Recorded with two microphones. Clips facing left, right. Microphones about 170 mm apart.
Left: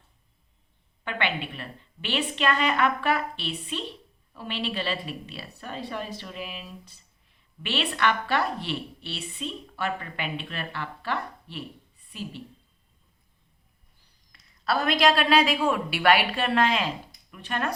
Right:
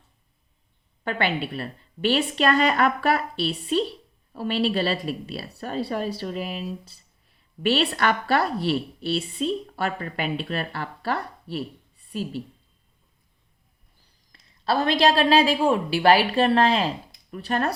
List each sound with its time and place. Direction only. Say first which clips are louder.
1.0 s a woman's voice: right 4 dB; 40° right (ahead or behind)
14.3 s a woman's voice: right 3 dB; 30° right (ahead or behind)